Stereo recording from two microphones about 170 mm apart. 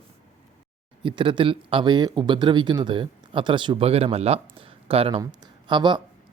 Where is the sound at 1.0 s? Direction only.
30° right (ahead or behind).